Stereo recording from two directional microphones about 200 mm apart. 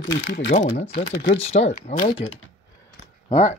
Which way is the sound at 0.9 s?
55° left (ahead or behind).